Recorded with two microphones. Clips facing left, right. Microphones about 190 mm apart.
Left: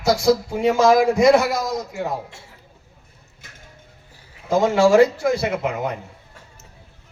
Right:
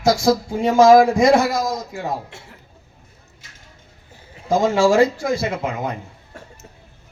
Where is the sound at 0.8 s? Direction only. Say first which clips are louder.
Right 4 dB; 65° left (ahead or behind).